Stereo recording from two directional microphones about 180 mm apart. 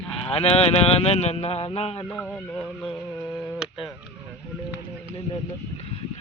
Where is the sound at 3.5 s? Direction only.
Centre (ahead or behind).